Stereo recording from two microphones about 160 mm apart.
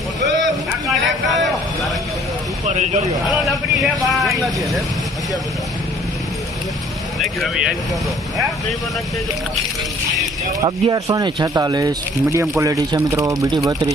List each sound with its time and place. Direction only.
0.4 s a sound: centre (ahead or behind)
2.6 s speech: 45° right (ahead or behind)
3.2 s speech: centre (ahead or behind)
7.2 s speech: centre (ahead or behind)
10.6 s speech: 20° right (ahead or behind)